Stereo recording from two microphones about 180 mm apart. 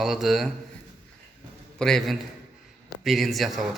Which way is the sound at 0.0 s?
Centre (ahead or behind).